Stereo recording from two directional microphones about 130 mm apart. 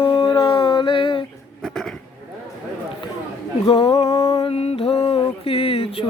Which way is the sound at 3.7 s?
35° left (ahead or behind).